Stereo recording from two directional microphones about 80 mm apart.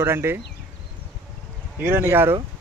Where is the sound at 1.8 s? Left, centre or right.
Right.